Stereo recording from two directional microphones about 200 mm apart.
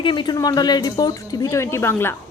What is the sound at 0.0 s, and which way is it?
Speech, 25° left (ahead or behind).